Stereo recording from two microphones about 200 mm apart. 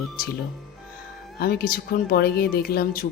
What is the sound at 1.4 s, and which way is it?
A woman's voice, 50° left (ahead or behind).